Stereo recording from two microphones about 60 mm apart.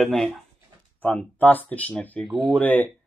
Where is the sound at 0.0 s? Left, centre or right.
Centre.